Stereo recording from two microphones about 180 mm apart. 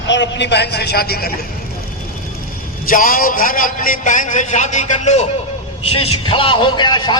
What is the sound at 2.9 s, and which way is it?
A man's voice, 50° left (ahead or behind).